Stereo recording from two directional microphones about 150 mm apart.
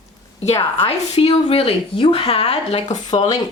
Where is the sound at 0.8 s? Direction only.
40° left (ahead or behind).